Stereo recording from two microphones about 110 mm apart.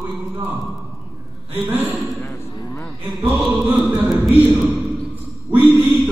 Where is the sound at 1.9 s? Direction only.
Centre (ahead or behind).